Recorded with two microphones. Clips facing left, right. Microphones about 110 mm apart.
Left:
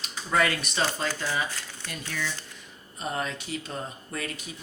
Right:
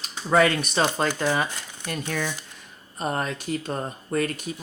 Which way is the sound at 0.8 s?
55° right (ahead or behind).